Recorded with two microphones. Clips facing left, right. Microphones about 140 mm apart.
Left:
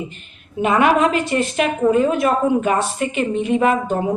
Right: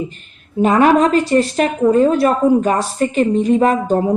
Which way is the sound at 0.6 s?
35° right (ahead or behind).